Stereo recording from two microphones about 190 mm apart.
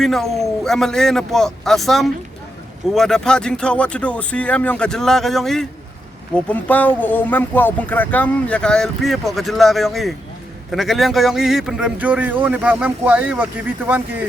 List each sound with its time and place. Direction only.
0.0 s speech: centre (ahead or behind)